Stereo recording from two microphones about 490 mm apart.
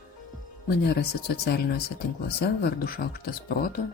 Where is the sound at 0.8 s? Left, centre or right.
Centre.